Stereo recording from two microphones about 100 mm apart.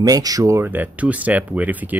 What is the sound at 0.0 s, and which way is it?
Speech, 40° right (ahead or behind).